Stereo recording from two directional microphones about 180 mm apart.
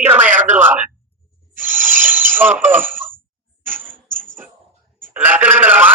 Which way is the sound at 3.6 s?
10° right (ahead or behind).